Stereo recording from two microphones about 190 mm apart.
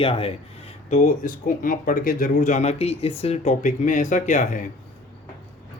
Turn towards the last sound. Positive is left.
turn(degrees=40)  # may be behind; listen again after turning